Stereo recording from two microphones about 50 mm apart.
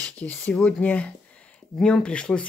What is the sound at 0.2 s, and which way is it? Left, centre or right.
Speech, left.